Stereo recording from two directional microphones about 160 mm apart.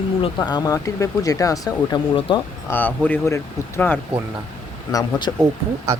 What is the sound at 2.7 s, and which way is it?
Speech, 10° left (ahead or behind).